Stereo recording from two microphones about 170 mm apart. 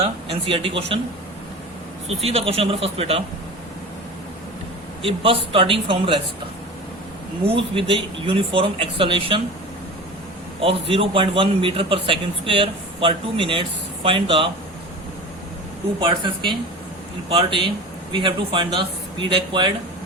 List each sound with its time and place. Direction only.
0.0 s a man's voice: 30° right (ahead or behind)
2.0 s a man's voice: 35° right (ahead or behind)
5.0 s a man's voice: 35° right (ahead or behind)
7.4 s a man's voice: 30° right (ahead or behind)
10.6 s a man's voice: 35° right (ahead or behind)
16.0 s a man's voice: 30° right (ahead or behind)